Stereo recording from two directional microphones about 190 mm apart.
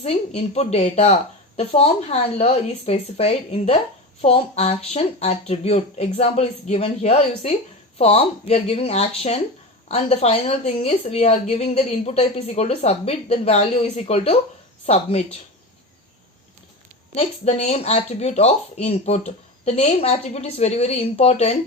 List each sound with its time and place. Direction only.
0.3 s speech: 35° left (ahead or behind)
17.2 s speech: 35° left (ahead or behind)